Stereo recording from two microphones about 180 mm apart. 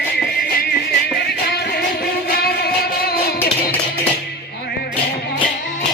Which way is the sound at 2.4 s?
60° left (ahead or behind).